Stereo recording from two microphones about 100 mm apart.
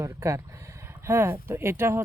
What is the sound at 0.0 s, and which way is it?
Speech, 30° right (ahead or behind).